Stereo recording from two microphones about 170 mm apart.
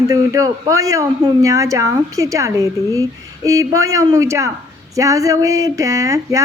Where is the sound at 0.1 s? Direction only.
20° right (ahead or behind).